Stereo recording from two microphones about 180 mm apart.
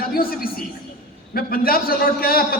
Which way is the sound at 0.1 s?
55° left (ahead or behind).